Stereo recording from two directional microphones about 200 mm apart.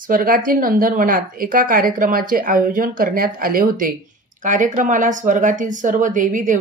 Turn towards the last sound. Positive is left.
turn(degrees=-40)  # may be behind; listen again after turning